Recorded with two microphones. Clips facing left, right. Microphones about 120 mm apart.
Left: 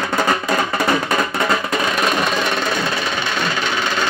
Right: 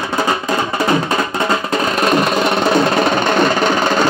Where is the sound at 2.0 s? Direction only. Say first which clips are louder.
Right 7 dB; 45° right (ahead or behind).